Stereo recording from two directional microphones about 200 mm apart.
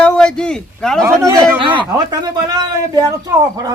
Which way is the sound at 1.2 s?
20° right (ahead or behind).